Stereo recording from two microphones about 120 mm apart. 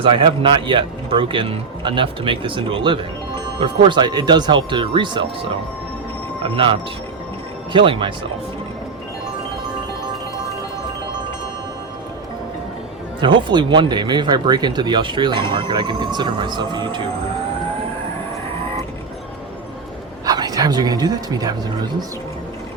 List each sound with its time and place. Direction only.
0.0 s a man's voice: 45° right (ahead or behind)
6.4 s a man's voice: 45° right (ahead or behind)
13.1 s speech: 40° right (ahead or behind)
20.2 s speech: 35° right (ahead or behind)